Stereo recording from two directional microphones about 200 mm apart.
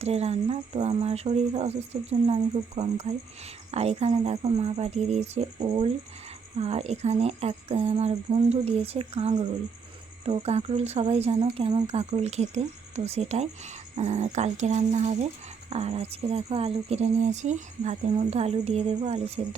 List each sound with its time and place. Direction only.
0.0 s speech: 30° right (ahead or behind)